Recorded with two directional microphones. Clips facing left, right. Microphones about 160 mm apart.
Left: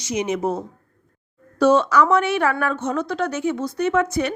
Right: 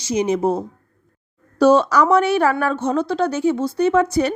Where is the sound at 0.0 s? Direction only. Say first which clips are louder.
Right 4 dB; 30° right (ahead or behind).